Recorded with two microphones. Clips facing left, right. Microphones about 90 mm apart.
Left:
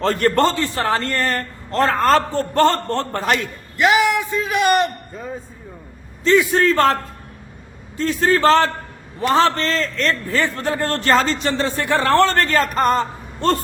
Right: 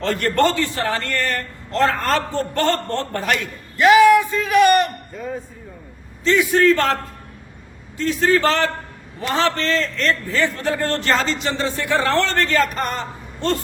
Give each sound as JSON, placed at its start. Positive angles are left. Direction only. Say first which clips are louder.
{"t": 0.0, "sound": "a man's voice", "louder": "left 2 dB", "side_deg": 35}
{"t": 3.8, "sound": "a man's voice", "louder": "right 5 dB", "side_deg": 20}
{"t": 6.2, "sound": "a man's voice", "louder": "even", "side_deg": 35}
{"t": 7.9, "sound": "a man's voice", "louder": "even", "side_deg": 40}